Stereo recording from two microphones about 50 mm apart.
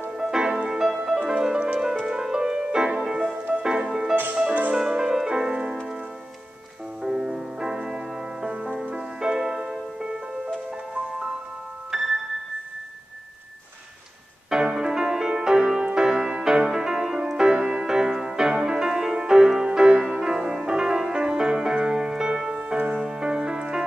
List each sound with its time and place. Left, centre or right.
0.2 s music: centre
3.3 s music: right
3.6 s music: centre
4.1 s music: right
4.7 s music: centre
7.0 s music: centre
8.5 s music: right; by 12.1 s centre
14.5 s music: centre